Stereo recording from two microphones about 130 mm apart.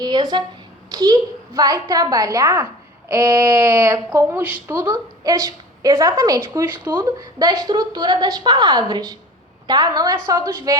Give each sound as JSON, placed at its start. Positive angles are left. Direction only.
{"t": 0.0, "sound": "a woman's voice", "side_deg": -30}
{"t": 4.8, "sound": "a woman's voice", "side_deg": -30}